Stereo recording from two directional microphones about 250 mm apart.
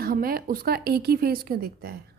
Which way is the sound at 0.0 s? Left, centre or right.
Right.